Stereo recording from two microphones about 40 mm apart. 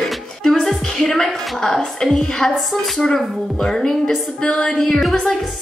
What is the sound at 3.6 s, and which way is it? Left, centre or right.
Speech, centre.